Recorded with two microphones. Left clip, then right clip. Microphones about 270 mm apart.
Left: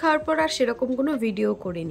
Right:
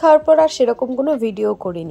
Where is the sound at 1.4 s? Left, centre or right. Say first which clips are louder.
Right 6 dB; right.